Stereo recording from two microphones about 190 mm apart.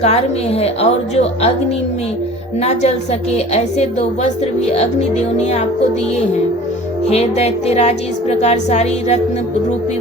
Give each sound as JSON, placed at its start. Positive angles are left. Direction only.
{"t": 0.0, "sound": "a woman's voice", "side_deg": 35}
{"t": 2.6, "sound": "a woman's voice", "side_deg": 35}
{"t": 7.1, "sound": "a woman's voice", "side_deg": 35}